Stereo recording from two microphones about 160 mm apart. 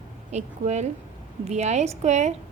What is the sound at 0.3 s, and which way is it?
A woman's voice, 45° right (ahead or behind).